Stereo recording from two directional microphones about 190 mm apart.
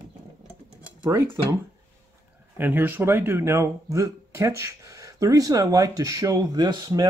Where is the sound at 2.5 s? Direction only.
10° right (ahead or behind).